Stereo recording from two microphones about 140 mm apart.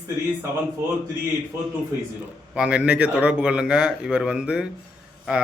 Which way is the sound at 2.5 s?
5° right (ahead or behind).